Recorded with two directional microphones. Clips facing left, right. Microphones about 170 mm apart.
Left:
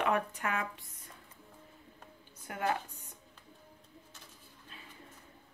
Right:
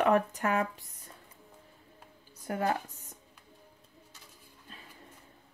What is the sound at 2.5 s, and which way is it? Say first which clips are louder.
Speech: right 3 dB; 45° right (ahead or behind).